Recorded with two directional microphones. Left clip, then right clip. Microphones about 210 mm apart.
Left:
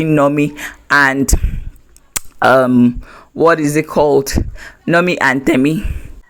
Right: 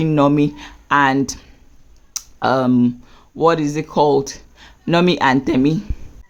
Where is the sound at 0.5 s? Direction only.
20° left (ahead or behind).